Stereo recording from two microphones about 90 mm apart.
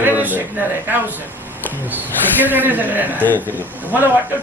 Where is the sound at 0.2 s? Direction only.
20° right (ahead or behind).